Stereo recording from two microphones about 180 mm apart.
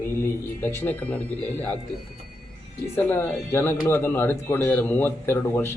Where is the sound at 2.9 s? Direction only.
10° left (ahead or behind).